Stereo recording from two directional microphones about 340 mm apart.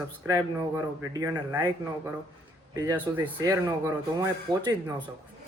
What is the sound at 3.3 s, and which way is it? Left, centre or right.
A man's voice, centre.